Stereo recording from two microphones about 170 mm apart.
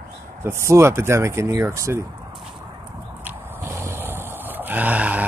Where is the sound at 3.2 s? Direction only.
15° right (ahead or behind).